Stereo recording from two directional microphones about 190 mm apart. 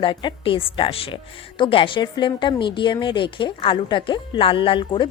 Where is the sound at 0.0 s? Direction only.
25° left (ahead or behind).